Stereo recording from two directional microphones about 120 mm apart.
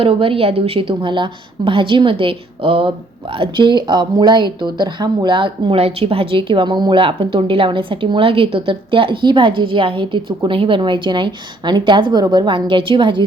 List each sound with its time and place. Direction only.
0.0 s speech: 50° right (ahead or behind)